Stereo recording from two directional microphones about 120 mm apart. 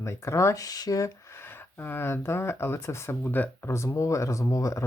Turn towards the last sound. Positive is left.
turn(degrees=25)  # may be behind; listen again after turning